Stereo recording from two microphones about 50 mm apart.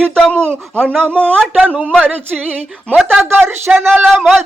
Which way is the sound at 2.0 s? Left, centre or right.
Right.